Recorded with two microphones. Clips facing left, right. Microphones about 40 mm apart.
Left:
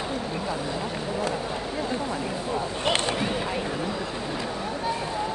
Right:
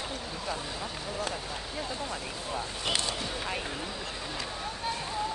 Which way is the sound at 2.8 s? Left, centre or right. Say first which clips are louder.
Left 7 dB; left.